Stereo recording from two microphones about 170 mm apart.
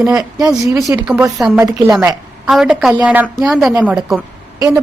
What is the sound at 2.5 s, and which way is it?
A woman's voice, centre (ahead or behind).